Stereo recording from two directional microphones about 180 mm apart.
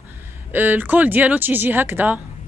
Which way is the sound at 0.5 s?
10° right (ahead or behind).